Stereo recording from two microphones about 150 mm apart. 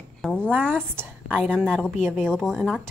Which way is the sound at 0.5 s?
10° right (ahead or behind).